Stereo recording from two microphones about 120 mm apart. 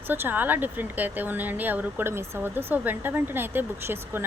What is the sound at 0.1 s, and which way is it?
A woman's voice, 15° right (ahead or behind).